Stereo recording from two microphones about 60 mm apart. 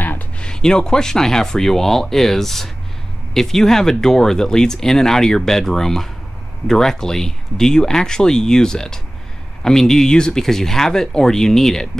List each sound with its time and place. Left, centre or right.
0.4 s speech: centre